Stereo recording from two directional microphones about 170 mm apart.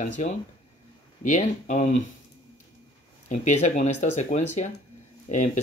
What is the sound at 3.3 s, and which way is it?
Speech, 45° left (ahead or behind).